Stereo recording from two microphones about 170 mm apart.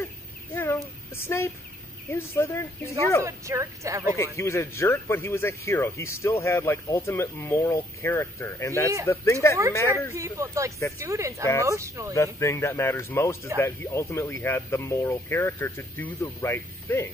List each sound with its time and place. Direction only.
1.2 s speech: 15° left (ahead or behind)
3.2 s speech: 15° right (ahead or behind)
4.1 s speech: 15° left (ahead or behind)
9.8 s speech: 15° right (ahead or behind)
12.1 s speech: 15° left (ahead or behind)